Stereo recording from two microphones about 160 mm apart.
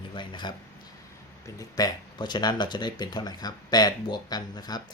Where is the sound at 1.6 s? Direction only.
25° left (ahead or behind).